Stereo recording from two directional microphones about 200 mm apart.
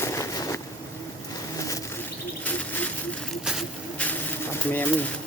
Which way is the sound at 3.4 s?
5° left (ahead or behind).